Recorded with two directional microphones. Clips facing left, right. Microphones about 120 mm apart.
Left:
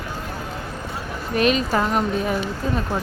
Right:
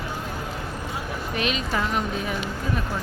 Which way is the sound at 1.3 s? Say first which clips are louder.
Left 8 dB; 45° left (ahead or behind).